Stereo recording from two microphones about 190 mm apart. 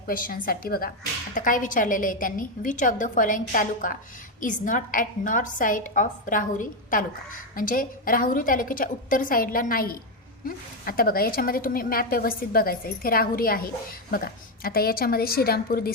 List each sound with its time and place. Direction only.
0.1 s a woman's voice: 50° left (ahead or behind)